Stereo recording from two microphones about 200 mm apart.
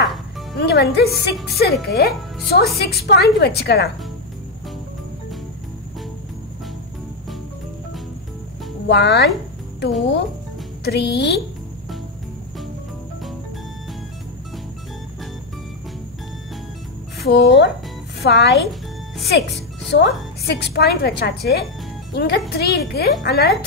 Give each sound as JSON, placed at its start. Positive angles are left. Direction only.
{"t": 0.0, "sound": "music", "side_deg": 0}
{"t": 0.6, "sound": "a woman's voice", "side_deg": 55}
{"t": 8.8, "sound": "a woman's voice", "side_deg": 60}
{"t": 10.8, "sound": "a woman's voice", "side_deg": 60}
{"t": 17.2, "sound": "a woman's voice", "side_deg": 60}